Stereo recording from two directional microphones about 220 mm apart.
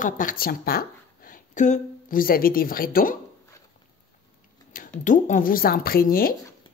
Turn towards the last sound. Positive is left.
turn(degrees=40)  # may be behind; listen again after turning